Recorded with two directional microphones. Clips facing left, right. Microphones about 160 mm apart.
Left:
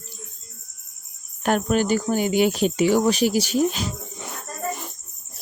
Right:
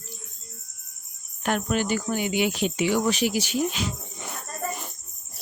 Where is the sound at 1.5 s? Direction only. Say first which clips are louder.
Left 5 dB; 40° left (ahead or behind).